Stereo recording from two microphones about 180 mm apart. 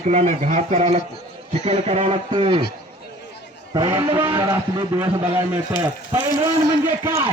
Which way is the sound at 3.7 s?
25° right (ahead or behind).